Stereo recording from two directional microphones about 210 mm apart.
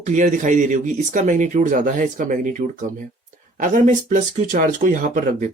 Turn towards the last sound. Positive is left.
turn(degrees=-40)  # may be behind; listen again after turning